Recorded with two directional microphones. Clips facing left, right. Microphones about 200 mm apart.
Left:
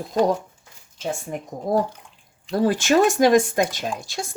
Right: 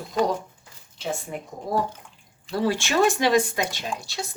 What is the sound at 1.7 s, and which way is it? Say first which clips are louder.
Speech: left 4 dB; 45° left (ahead or behind).